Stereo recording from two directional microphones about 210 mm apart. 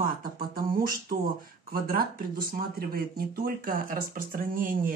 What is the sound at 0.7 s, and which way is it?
Speech, 45° right (ahead or behind).